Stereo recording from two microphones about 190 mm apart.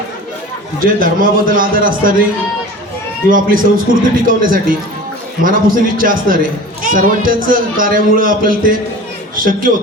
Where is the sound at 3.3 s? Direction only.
45° right (ahead or behind).